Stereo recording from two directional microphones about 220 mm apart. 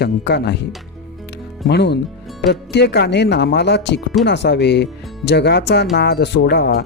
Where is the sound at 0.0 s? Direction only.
50° left (ahead or behind).